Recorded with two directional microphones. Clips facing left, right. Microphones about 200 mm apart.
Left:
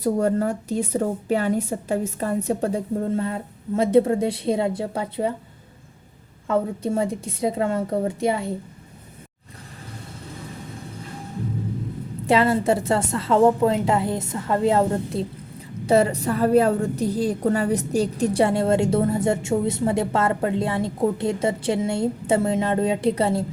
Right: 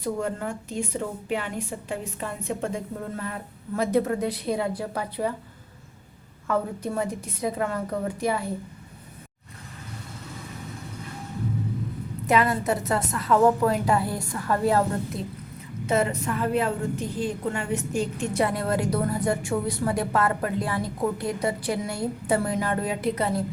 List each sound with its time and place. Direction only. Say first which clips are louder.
0.0 s a woman's voice: left 8 dB; 40° left (ahead or behind)
6.5 s a woman's voice: left 4 dB; 25° left (ahead or behind)
12.2 s a woman's voice: left 4 dB; 30° left (ahead or behind)